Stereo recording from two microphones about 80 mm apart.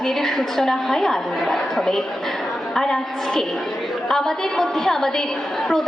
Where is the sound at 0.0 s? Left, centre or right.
Centre.